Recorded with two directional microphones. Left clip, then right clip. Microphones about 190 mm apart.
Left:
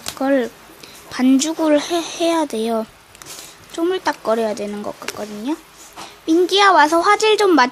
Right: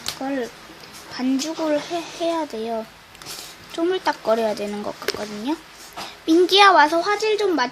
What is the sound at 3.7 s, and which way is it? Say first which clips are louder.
Speech: left 2 dB; 15° left (ahead or behind).